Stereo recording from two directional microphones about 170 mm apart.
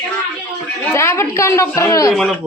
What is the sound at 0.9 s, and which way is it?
Speech, 15° left (ahead or behind).